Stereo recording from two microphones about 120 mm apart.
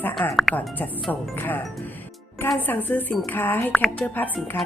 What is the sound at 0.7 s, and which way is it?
Speech, 15° left (ahead or behind).